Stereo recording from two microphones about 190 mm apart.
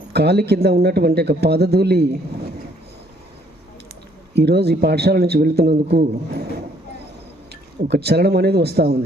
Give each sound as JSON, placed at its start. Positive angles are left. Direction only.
{"t": 0.1, "sound": "speech", "side_deg": -60}
{"t": 4.4, "sound": "speech", "side_deg": -60}
{"t": 7.9, "sound": "speech", "side_deg": -60}